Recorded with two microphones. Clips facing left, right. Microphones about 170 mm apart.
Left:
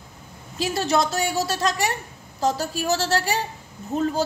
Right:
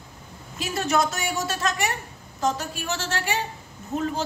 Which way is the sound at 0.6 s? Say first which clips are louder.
Left 2 dB; 30° left (ahead or behind).